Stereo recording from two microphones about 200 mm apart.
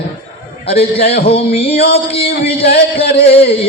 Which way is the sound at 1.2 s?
30° left (ahead or behind).